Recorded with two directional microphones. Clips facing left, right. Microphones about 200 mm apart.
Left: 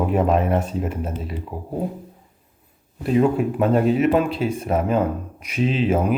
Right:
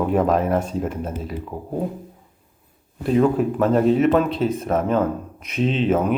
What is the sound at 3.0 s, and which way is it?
Speech, 5° left (ahead or behind).